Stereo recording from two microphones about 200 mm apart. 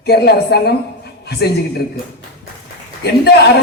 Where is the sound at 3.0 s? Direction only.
55° left (ahead or behind).